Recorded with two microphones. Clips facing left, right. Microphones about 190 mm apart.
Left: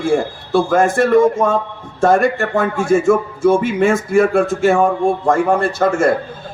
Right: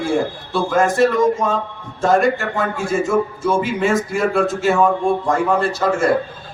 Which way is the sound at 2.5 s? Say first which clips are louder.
Left 5 dB; 50° left (ahead or behind).